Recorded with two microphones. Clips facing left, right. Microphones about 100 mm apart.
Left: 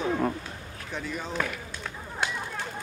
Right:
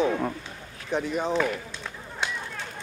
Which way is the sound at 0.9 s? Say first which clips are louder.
Right 8 dB; 20° right (ahead or behind).